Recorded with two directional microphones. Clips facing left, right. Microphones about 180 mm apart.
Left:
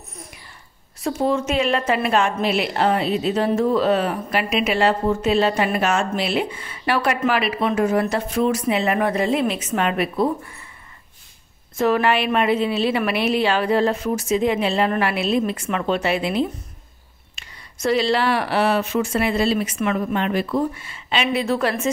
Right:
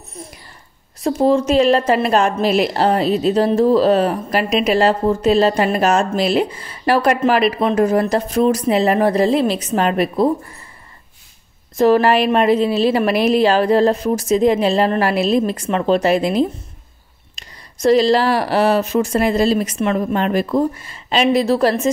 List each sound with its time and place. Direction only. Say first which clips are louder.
1.0 s a woman's voice: right 6 dB; 35° right (ahead or behind)
11.7 s a woman's voice: right 6 dB; 35° right (ahead or behind)